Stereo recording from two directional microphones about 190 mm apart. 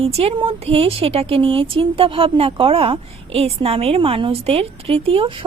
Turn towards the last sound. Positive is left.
turn(degrees=-30)  # may be behind; listen again after turning